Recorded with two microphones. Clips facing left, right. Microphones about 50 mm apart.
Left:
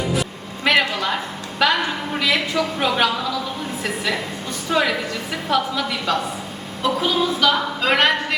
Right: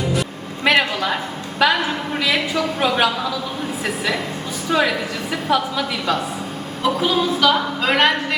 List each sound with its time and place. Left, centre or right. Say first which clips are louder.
0.2 s a sound: right 1 dB; centre
1.6 s a woman's voice: right 1 dB; centre
4.7 s a woman's voice: right 1 dB; centre